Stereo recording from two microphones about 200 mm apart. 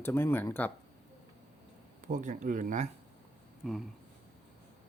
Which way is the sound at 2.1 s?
40° right (ahead or behind).